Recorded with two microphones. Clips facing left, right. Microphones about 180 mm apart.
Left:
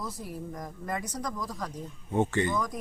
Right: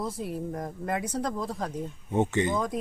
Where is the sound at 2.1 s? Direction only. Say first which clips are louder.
Right 1 dB; 20° right (ahead or behind).